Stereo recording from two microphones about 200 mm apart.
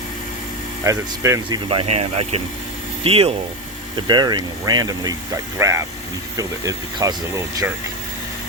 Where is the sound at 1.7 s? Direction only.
30° right (ahead or behind).